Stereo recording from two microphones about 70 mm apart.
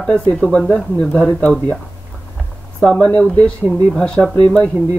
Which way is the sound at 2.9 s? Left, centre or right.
Centre.